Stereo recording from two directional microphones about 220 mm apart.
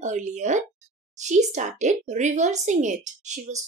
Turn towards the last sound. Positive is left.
turn(degrees=-35)  # may be behind; listen again after turning